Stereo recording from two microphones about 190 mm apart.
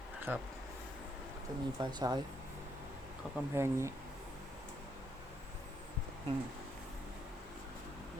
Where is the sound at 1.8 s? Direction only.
20° right (ahead or behind).